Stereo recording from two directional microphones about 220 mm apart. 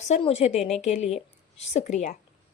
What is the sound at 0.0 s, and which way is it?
A woman's voice, 30° left (ahead or behind).